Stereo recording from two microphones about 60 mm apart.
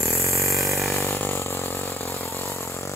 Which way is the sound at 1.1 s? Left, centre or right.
Left.